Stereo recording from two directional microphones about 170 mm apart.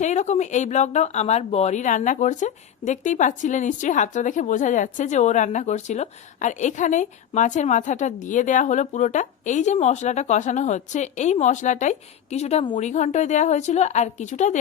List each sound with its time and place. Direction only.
0.0 s speech: 45° left (ahead or behind)